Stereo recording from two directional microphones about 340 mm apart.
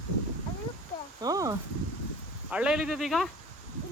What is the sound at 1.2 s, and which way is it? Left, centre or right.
Speech, centre.